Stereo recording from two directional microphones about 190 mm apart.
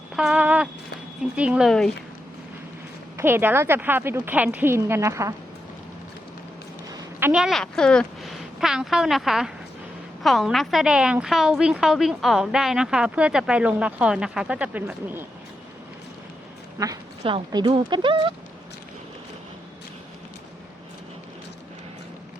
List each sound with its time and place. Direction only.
0.2 s a sound: 5° right (ahead or behind)
1.2 s a woman's voice: 5° right (ahead or behind)
3.2 s a woman's voice: 10° right (ahead or behind)
7.2 s a woman's voice: 10° right (ahead or behind)
16.7 s speech: 20° right (ahead or behind)